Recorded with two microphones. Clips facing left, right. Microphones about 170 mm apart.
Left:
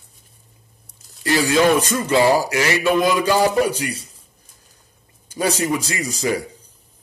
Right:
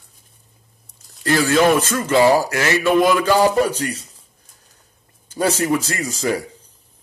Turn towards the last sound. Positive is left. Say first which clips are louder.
# even
turn(degrees=15)  # may be behind; listen again after turning